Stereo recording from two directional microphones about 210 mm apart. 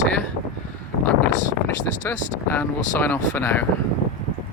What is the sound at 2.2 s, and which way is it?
Speech, 35° left (ahead or behind).